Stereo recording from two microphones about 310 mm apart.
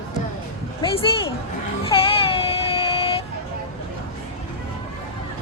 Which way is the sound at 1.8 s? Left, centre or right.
Centre.